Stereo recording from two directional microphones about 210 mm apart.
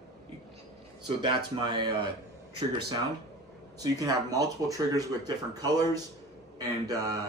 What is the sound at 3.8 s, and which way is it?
Speech, 15° right (ahead or behind).